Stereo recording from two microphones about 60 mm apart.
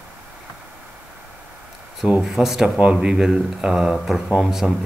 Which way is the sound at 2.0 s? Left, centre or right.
Centre.